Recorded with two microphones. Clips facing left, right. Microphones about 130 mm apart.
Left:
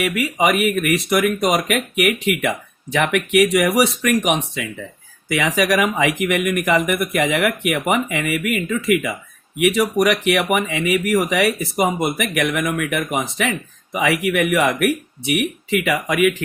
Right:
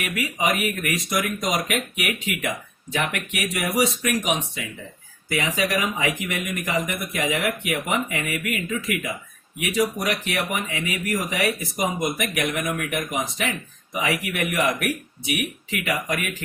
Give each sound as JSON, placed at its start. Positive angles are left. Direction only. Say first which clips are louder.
{"t": 0.0, "sound": "speech", "louder": "left 7 dB", "side_deg": 70}